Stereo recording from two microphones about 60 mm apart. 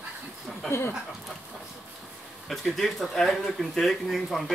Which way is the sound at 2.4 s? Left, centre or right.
Centre.